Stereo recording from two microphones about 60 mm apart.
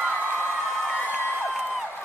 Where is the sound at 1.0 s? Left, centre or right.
Left.